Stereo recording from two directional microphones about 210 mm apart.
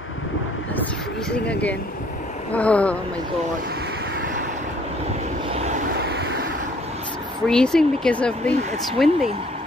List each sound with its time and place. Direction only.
1.3 s speech: 5° left (ahead or behind)
5.5 s vehicle: 30° right (ahead or behind)
5.9 s vehicle: 50° right (ahead or behind)
7.4 s speech: 5° left (ahead or behind)